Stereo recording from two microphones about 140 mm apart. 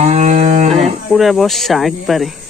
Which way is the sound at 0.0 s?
55° right (ahead or behind).